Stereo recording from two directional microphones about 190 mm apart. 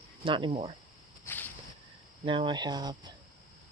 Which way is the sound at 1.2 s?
10° left (ahead or behind).